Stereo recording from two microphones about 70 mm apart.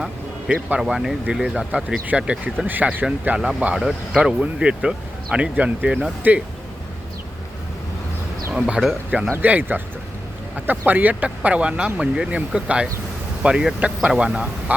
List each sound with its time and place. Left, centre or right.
0.8 s speech: centre
2.6 s speech: right
3.8 s speech: centre
4.2 s speech: centre
8.5 s speech: centre
9.3 s speech: right; by 14.4 s centre
14.7 s speech: right